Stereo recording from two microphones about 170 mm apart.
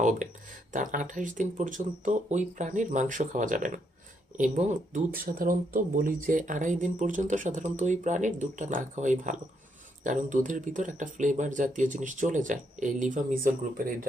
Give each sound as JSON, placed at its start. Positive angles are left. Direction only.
{"t": 0.0, "sound": "speech", "side_deg": -45}